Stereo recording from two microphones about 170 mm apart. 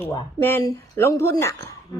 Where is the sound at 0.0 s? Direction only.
15° left (ahead or behind).